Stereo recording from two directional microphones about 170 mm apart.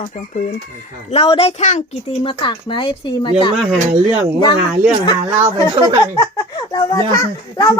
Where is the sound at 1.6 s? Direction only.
45° left (ahead or behind).